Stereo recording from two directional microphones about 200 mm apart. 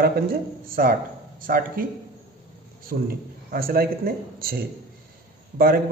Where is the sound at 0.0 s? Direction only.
45° right (ahead or behind).